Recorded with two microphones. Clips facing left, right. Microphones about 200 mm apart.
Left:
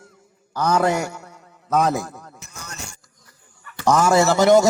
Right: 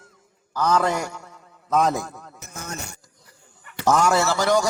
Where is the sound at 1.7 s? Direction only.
Centre (ahead or behind).